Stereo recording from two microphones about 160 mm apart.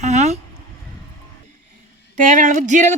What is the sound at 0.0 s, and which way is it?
Speech, 45° right (ahead or behind).